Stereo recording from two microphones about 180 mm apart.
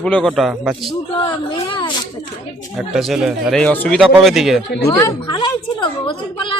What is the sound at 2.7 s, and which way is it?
Speech, centre (ahead or behind).